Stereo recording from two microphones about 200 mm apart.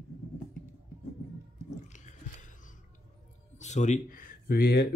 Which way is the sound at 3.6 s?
35° left (ahead or behind).